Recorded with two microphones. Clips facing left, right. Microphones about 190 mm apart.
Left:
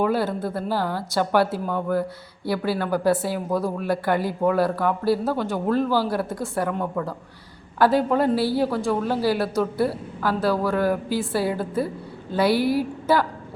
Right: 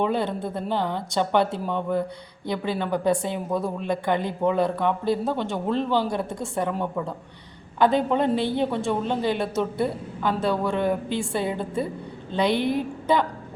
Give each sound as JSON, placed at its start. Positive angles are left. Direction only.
{"t": 0.0, "sound": "a woman's voice", "side_deg": 5}
{"t": 0.5, "sound": "a woman's voice", "side_deg": -20}
{"t": 1.1, "sound": "a woman's voice", "side_deg": 5}